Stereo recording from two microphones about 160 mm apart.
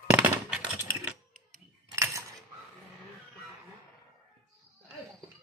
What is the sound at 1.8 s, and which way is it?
Cutlery, 20° right (ahead or behind).